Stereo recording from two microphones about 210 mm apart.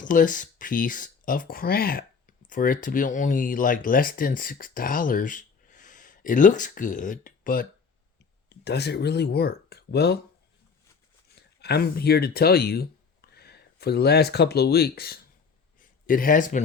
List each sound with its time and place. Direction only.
0.0 s speech: 40° left (ahead or behind)
8.4 s speech: 50° left (ahead or behind)
11.3 s speech: 50° left (ahead or behind)